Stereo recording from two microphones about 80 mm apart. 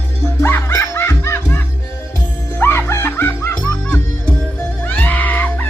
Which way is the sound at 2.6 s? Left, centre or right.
Left.